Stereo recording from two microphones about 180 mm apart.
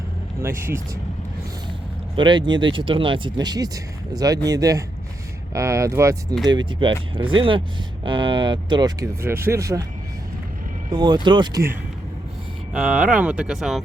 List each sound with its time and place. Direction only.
0.3 s speech: 15° right (ahead or behind)
2.1 s speech: 25° right (ahead or behind)
6.7 s speech: 25° right (ahead or behind)
10.9 s speech: 25° right (ahead or behind)
12.7 s speech: 5° right (ahead or behind)